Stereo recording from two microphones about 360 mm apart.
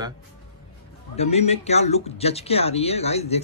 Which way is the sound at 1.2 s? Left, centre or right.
Centre.